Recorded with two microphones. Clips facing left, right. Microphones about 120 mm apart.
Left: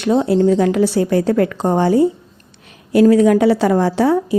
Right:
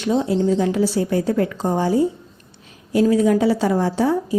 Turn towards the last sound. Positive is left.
turn(degrees=75)  # may be behind; listen again after turning